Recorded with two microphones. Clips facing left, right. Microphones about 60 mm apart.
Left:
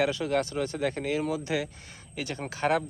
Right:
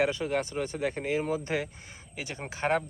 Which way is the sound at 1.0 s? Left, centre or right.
Right.